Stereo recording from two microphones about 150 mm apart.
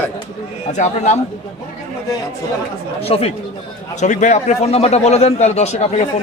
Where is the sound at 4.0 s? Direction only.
55° left (ahead or behind).